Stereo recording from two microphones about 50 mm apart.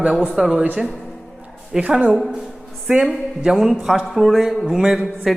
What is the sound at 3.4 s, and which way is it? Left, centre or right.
A man's voice, centre.